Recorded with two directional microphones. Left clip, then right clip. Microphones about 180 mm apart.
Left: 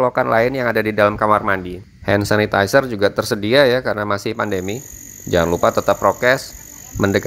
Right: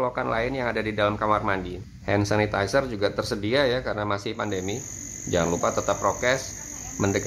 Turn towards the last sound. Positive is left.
turn(degrees=40)  # may be behind; listen again after turning